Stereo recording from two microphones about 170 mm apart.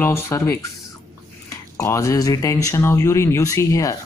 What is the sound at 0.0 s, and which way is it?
Speech, 15° left (ahead or behind).